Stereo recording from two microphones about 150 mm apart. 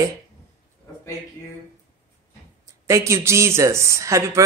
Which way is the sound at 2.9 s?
20° right (ahead or behind).